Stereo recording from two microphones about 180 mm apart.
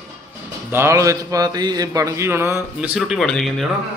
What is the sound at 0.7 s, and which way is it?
A man's voice, 15° right (ahead or behind).